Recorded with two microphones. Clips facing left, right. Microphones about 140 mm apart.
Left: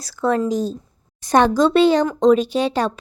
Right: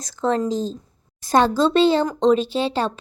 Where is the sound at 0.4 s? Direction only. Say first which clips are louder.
Left 2 dB; 10° left (ahead or behind).